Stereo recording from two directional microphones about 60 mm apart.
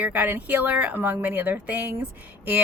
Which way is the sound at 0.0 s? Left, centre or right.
Right.